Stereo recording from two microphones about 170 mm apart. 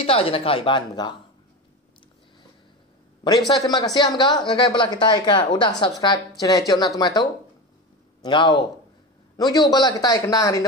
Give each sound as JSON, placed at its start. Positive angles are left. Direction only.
{"t": 0.0, "sound": "speech", "side_deg": 35}
{"t": 3.4, "sound": "a man's voice", "side_deg": 25}